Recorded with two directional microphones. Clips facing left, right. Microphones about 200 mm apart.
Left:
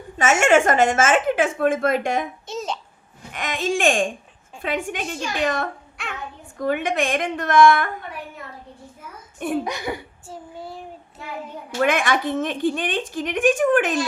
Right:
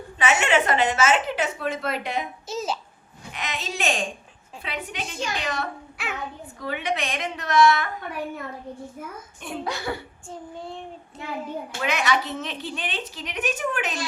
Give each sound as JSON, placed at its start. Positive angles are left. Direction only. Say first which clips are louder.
{"t": 0.2, "sound": "a woman's voice", "louder": "left 5 dB", "side_deg": 45}
{"t": 2.5, "sound": "child singing", "louder": "right 3 dB", "side_deg": 0}
{"t": 3.3, "sound": "a woman's voice", "louder": "left 8 dB", "side_deg": 50}
{"t": 6.0, "sound": "child singing", "louder": "right 1 dB", "side_deg": -5}
{"t": 6.6, "sound": "a woman's voice", "louder": "left 6 dB", "side_deg": 50}
{"t": 9.6, "sound": "speech", "louder": "left 2 dB", "side_deg": 15}
{"t": 10.2, "sound": "child singing", "louder": "even", "side_deg": 5}
{"t": 11.8, "sound": "a woman's voice", "louder": "left 5 dB", "side_deg": 50}